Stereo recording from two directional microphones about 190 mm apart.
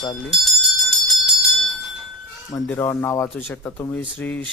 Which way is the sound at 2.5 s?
15° left (ahead or behind).